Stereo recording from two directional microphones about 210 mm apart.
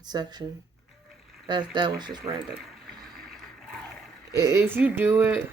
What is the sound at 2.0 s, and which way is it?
Speech, centre (ahead or behind).